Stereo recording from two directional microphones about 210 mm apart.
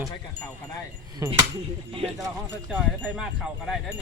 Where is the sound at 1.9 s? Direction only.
25° right (ahead or behind).